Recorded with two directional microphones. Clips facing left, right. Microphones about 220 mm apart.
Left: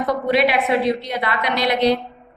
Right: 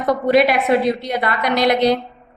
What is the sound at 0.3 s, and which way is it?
A woman's voice, 45° right (ahead or behind).